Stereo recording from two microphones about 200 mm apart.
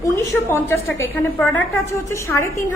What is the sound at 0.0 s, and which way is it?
A woman's voice, 15° left (ahead or behind).